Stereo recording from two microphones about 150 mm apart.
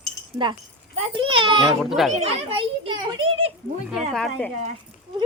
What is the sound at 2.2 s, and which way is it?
Speech, 40° right (ahead or behind).